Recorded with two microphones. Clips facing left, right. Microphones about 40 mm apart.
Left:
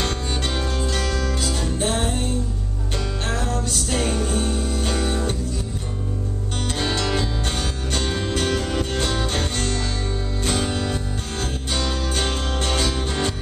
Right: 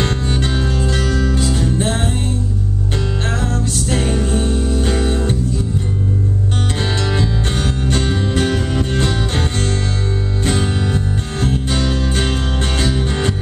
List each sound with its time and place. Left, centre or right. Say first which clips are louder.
0.0 s music: right 6 dB; centre
3.9 s music: right 4 dB; right
6.8 s music: right 1 dB; centre